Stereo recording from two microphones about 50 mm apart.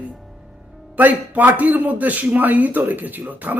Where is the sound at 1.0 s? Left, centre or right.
Right.